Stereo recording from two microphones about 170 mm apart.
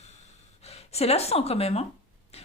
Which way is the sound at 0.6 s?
40° left (ahead or behind).